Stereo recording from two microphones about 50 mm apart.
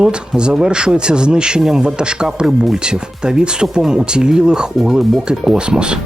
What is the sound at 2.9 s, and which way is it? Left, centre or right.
Speech, centre.